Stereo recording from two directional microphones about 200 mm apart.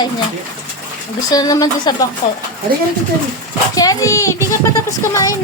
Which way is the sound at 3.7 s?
20° left (ahead or behind).